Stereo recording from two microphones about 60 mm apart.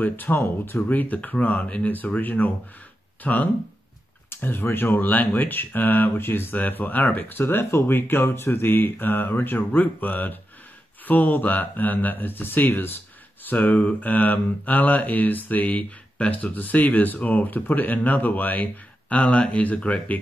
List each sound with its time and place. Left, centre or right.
0.0 s speech: left
4.3 s speech: left